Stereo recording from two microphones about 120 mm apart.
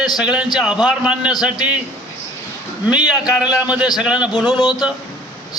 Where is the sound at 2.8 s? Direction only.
10° right (ahead or behind).